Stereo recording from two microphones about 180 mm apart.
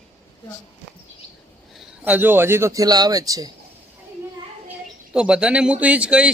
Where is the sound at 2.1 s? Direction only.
10° right (ahead or behind).